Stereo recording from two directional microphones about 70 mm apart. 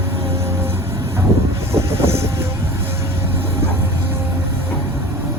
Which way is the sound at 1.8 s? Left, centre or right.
Right.